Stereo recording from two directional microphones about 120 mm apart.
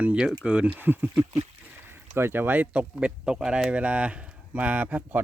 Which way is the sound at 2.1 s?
20° right (ahead or behind).